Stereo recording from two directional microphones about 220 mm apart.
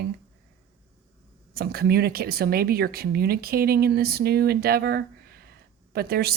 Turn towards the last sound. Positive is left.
turn(degrees=-45)  # may be behind; listen again after turning